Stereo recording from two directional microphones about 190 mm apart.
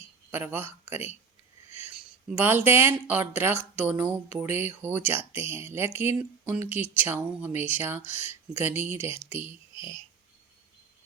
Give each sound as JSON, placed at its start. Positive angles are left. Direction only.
{"t": 0.3, "sound": "speech", "side_deg": -10}
{"t": 2.2, "sound": "speech", "side_deg": -10}
{"t": 9.5, "sound": "a sound", "side_deg": 25}